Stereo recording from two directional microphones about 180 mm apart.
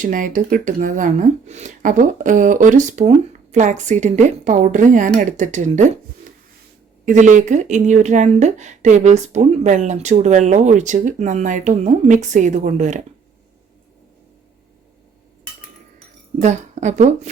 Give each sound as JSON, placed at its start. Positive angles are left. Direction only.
{"t": 0.0, "sound": "a woman's voice", "side_deg": -45}
{"t": 7.0, "sound": "speech", "side_deg": -45}
{"t": 16.4, "sound": "a woman's voice", "side_deg": -40}